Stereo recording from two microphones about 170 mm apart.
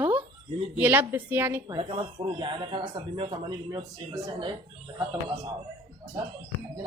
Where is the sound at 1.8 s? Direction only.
30° right (ahead or behind).